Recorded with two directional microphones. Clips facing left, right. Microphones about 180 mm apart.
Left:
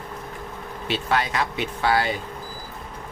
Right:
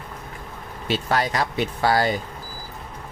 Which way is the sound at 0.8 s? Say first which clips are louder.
Right 1 dB; 40° right (ahead or behind).